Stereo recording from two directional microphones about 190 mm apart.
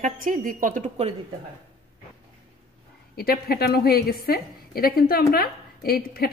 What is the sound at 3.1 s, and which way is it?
A woman's voice, 55° left (ahead or behind).